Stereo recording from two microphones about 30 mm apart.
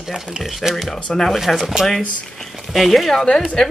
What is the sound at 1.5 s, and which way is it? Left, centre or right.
Speech, centre.